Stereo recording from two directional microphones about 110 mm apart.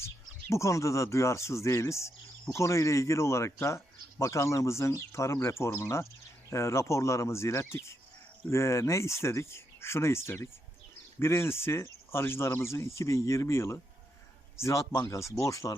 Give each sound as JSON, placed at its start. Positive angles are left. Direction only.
{"t": 0.5, "sound": "speech", "side_deg": 25}